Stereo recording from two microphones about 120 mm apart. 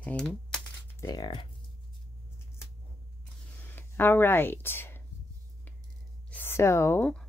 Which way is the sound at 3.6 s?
20° left (ahead or behind).